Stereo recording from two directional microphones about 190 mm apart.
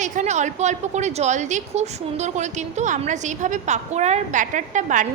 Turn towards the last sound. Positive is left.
turn(degrees=-40)  # may be behind; listen again after turning